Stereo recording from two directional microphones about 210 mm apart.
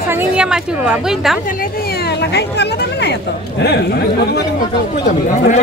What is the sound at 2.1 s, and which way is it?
Speech, 55° left (ahead or behind).